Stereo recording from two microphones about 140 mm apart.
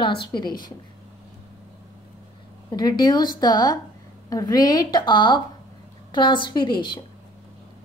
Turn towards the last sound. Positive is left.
turn(degrees=35)  # may be behind; listen again after turning